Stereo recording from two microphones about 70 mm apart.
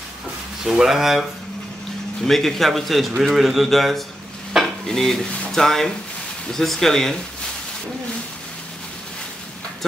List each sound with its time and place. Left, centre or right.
0.7 s a man's voice: centre
2.2 s a man's voice: centre